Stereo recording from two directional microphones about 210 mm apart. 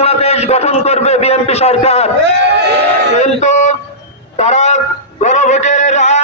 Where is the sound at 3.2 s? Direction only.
35° left (ahead or behind).